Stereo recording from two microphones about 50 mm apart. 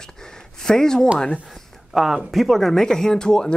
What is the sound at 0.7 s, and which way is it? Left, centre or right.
Speech, centre.